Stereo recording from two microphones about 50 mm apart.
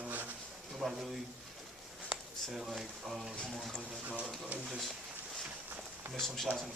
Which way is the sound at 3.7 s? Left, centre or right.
Right.